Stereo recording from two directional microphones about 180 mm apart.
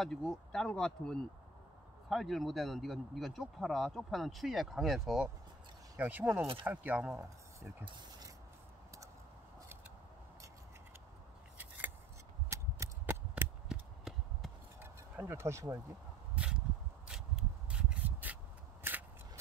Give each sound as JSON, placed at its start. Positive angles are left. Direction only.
{"t": 0.0, "sound": "speech", "side_deg": 5}
{"t": 7.8, "sound": "speech", "side_deg": -25}
{"t": 12.4, "sound": "a sound", "side_deg": -15}
{"t": 17.1, "sound": "rub", "side_deg": -5}